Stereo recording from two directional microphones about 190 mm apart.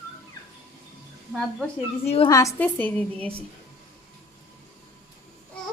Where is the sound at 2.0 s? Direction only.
30° left (ahead or behind).